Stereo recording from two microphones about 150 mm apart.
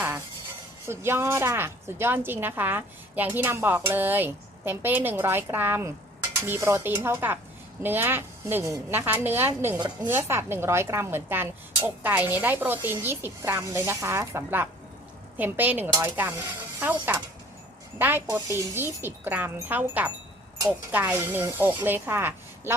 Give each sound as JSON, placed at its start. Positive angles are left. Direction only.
{"t": 0.9, "sound": "a woman's voice", "side_deg": -15}